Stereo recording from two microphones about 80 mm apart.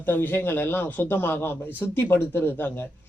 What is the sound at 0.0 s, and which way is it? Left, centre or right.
Speech, left.